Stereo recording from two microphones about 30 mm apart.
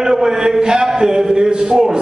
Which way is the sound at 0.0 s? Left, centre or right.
Centre.